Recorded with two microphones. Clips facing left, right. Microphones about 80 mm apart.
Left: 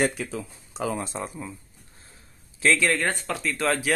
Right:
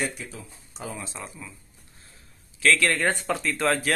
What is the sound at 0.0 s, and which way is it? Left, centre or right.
Speech, left.